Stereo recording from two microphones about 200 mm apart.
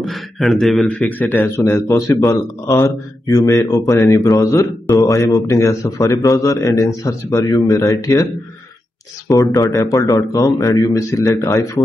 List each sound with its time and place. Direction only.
0.0 s speech: centre (ahead or behind); by 8.3 s 15° left (ahead or behind)
9.3 s speech: 20° left (ahead or behind)